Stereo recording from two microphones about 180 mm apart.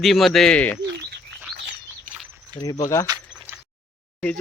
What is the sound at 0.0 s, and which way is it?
Speech, centre (ahead or behind).